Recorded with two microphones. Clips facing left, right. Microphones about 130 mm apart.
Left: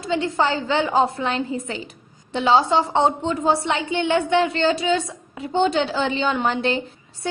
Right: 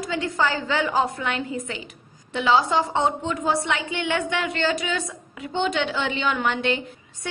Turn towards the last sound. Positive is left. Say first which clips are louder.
# left 2 dB
turn(degrees=30)  # may be behind; listen again after turning